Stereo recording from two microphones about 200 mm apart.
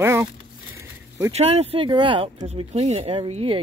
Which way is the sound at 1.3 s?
30° right (ahead or behind).